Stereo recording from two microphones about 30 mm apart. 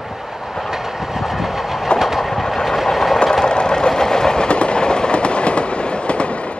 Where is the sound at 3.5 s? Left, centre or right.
Left.